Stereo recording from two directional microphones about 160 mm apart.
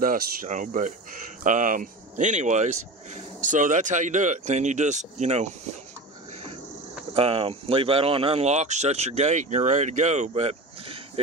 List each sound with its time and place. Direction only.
0.0 s speech: 60° right (ahead or behind)
7.2 s speech: 35° right (ahead or behind)